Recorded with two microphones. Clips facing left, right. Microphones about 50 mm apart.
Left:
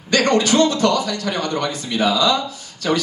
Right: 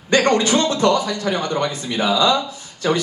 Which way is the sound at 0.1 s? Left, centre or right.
Right.